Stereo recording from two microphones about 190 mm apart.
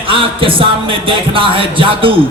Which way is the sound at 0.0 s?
25° right (ahead or behind).